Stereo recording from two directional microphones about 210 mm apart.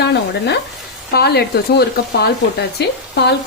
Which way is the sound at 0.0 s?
55° left (ahead or behind).